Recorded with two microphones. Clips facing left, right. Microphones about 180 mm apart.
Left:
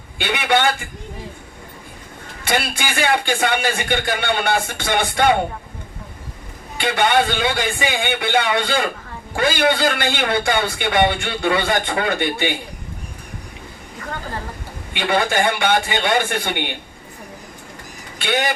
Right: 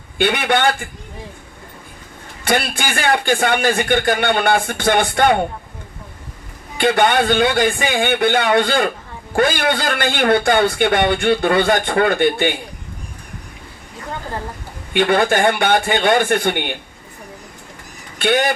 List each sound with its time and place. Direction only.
0.2 s a man's voice: 50° right (ahead or behind)
2.4 s a man's voice: 50° right (ahead or behind)
6.7 s a man's voice: 50° right (ahead or behind)
14.9 s a man's voice: 50° right (ahead or behind)
18.2 s a man's voice: 50° right (ahead or behind)